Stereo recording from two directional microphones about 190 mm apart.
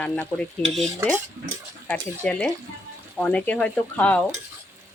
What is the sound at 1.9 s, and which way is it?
Speech, 5° left (ahead or behind).